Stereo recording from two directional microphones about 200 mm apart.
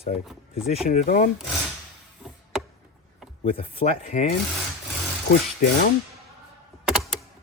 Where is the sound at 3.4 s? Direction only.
30° left (ahead or behind).